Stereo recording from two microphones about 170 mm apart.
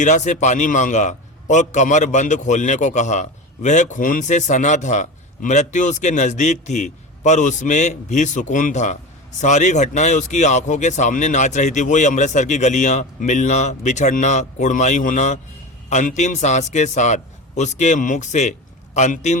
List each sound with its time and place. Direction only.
0.0 s a man's voice: 45° left (ahead or behind)